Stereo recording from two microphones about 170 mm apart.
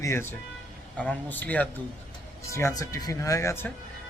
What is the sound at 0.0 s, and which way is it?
Speech, 15° left (ahead or behind).